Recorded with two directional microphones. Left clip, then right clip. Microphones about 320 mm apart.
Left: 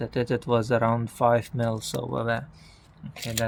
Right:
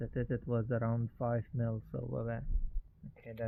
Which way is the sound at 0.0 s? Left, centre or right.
Centre.